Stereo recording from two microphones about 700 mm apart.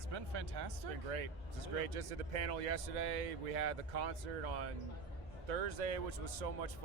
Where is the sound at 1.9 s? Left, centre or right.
Right.